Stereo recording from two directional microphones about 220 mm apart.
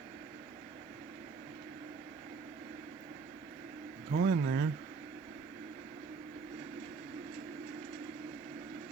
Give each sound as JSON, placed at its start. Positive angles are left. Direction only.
{"t": 4.1, "sound": "speech", "side_deg": -50}